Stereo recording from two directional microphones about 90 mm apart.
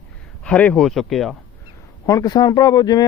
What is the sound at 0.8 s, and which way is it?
Speech, centre (ahead or behind).